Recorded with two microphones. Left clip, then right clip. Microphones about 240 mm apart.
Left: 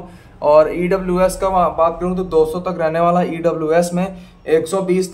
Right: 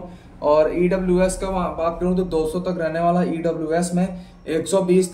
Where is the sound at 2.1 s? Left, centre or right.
Left.